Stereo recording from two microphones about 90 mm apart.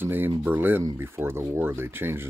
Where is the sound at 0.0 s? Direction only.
25° right (ahead or behind).